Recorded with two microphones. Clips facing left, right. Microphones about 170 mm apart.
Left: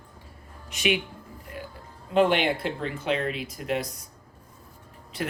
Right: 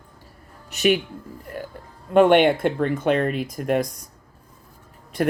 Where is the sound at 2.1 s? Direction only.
55° right (ahead or behind).